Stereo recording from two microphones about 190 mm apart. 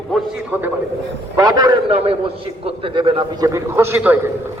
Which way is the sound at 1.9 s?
30° right (ahead or behind).